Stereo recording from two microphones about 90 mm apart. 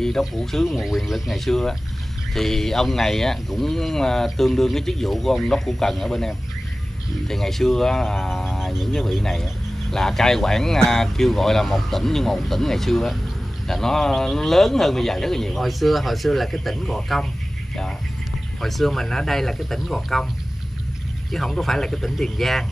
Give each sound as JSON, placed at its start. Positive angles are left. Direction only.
{"t": 0.0, "sound": "speech", "side_deg": 5}
{"t": 18.6, "sound": "speech", "side_deg": 0}
{"t": 21.3, "sound": "speech", "side_deg": 0}